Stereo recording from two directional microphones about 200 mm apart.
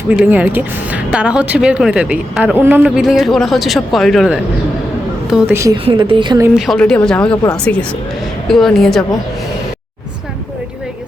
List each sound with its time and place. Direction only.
0.1 s speech: 5° right (ahead or behind)
5.3 s a woman's voice: 10° right (ahead or behind)
5.7 s a woman's voice: 25° right (ahead or behind)
6.5 s speech: centre (ahead or behind)